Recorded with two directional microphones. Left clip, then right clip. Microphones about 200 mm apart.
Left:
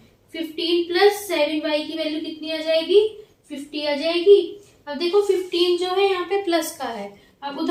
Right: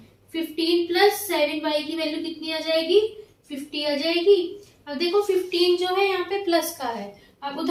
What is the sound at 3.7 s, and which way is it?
Speech, centre (ahead or behind).